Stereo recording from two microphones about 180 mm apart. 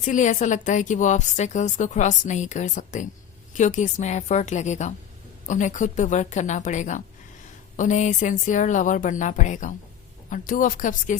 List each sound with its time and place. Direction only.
0.0 s a woman's voice: 45° left (ahead or behind)